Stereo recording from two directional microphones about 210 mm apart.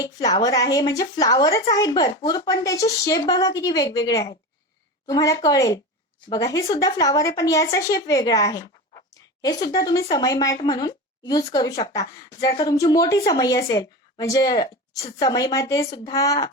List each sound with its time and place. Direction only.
0.0 s speech: 15° left (ahead or behind)